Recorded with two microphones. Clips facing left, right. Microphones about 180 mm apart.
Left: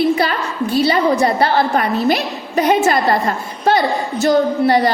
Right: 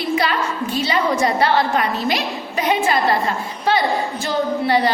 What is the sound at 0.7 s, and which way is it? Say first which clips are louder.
A woman's voice: left 6 dB; 35° left (ahead or behind).